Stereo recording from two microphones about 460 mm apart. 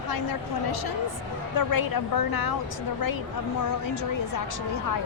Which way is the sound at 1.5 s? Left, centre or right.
Left.